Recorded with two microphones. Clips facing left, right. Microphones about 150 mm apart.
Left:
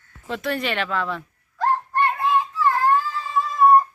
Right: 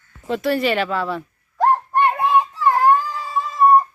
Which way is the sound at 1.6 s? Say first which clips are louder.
Right 4 dB; 55° right (ahead or behind).